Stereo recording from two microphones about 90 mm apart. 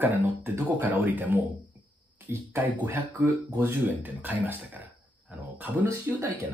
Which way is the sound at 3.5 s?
35° right (ahead or behind).